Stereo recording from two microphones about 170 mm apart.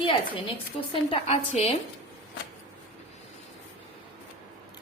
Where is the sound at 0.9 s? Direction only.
35° left (ahead or behind).